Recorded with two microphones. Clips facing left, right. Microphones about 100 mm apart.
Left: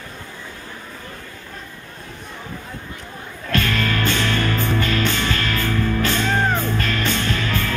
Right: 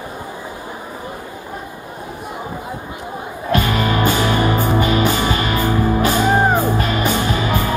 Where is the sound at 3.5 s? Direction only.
15° right (ahead or behind).